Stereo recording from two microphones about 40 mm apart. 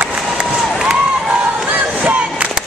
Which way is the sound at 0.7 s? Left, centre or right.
Centre.